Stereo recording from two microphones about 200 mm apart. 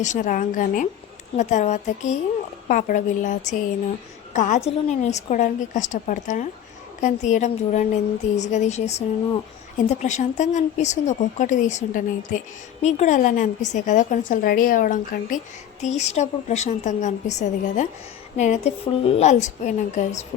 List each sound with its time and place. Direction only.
0.0 s a woman's voice: 40° left (ahead or behind)